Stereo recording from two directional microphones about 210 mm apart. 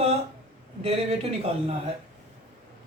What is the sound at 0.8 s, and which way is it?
Speech, 30° right (ahead or behind).